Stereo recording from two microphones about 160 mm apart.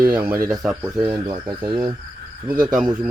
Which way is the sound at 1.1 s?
30° right (ahead or behind).